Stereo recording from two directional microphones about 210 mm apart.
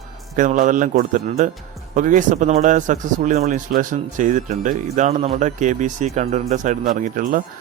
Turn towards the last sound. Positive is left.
turn(degrees=-40)  # may be behind; listen again after turning